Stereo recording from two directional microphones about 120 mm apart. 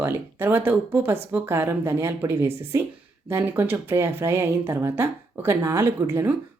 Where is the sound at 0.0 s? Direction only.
20° right (ahead or behind).